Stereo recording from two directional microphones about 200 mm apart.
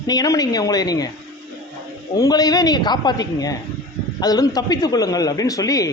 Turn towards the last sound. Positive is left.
turn(degrees=15)  # may be behind; listen again after turning